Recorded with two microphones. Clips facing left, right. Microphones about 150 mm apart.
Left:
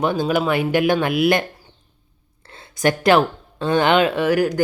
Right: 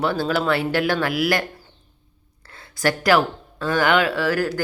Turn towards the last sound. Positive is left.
turn(degrees=15)  # may be behind; listen again after turning